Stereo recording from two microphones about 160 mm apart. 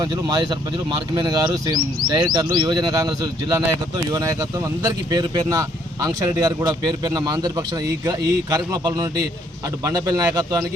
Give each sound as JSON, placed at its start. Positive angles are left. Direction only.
{"t": 0.0, "sound": "speech", "side_deg": -25}